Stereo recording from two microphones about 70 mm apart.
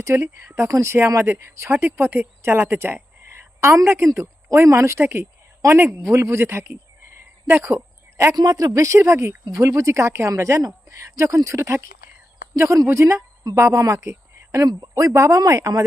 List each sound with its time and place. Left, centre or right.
0.0 s speech: right
5.0 s speech: right
7.4 s a sound: right
8.4 s speech: right
13.4 s a woman's voice: right